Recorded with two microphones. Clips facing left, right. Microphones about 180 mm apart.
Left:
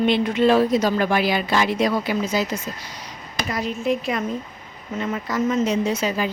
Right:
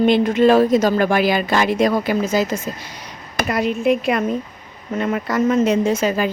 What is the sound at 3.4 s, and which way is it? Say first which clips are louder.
Speech: right 6 dB; 65° right (ahead or behind).